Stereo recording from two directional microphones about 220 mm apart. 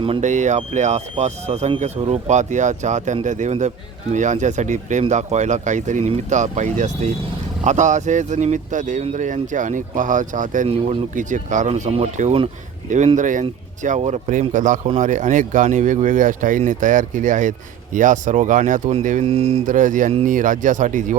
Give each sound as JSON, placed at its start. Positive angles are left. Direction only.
{"t": 0.0, "sound": "speech", "side_deg": -30}